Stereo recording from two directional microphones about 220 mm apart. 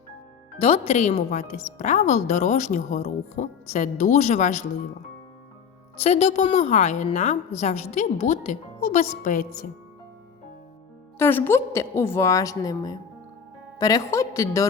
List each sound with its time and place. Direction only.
0.6 s speech: 25° left (ahead or behind)
6.0 s speech: 30° left (ahead or behind)
11.2 s a woman's voice: 10° left (ahead or behind)